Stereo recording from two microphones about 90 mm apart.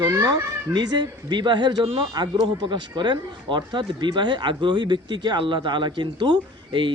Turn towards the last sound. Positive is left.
turn(degrees=-65)  # may be behind; listen again after turning